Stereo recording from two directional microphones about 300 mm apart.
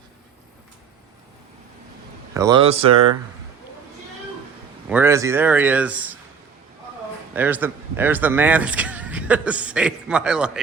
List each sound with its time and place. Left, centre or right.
2.3 s speech: centre
4.9 s speech: centre
7.3 s speech: centre